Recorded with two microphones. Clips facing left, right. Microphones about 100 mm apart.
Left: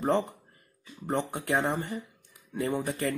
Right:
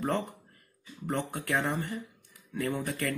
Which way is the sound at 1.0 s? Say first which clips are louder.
Left 3 dB; 25° left (ahead or behind).